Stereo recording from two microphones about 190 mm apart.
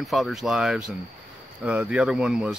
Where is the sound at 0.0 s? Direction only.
Centre (ahead or behind).